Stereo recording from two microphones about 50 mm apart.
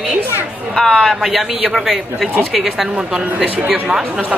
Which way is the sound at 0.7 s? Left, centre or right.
Centre.